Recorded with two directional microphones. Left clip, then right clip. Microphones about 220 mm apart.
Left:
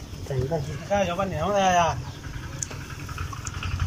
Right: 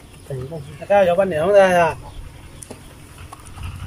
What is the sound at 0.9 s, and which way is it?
Speech, 40° right (ahead or behind).